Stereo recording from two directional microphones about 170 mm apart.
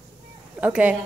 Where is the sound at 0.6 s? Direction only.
10° right (ahead or behind).